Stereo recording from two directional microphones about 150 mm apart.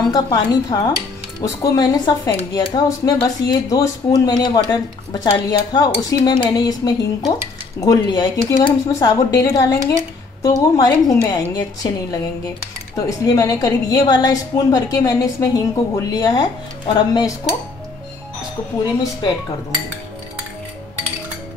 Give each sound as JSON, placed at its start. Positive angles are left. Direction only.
{"t": 0.1, "sound": "speech", "side_deg": 25}